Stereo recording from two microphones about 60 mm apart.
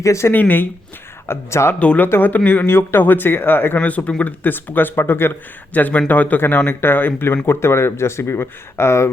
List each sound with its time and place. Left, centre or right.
0.0 s speech: left
0.3 s speech: left
1.3 s speech: left
1.8 s speech: left
2.0 s speech: left
3.8 s speech: left
5.7 s speech: left